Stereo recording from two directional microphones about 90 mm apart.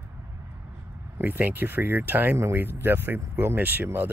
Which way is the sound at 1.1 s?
20° right (ahead or behind).